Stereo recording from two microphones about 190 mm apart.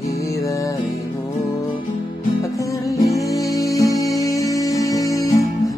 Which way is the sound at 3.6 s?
15° left (ahead or behind).